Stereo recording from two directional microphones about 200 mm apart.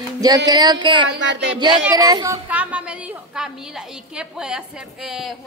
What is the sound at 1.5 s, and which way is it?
Speech, 20° right (ahead or behind).